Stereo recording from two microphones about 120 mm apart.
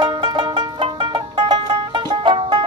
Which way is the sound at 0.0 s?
45° right (ahead or behind).